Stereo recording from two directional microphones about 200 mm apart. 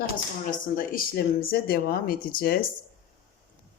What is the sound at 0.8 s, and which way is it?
Speech, 45° left (ahead or behind).